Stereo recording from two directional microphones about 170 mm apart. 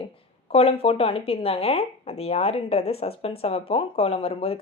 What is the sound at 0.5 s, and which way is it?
Speech, 35° left (ahead or behind).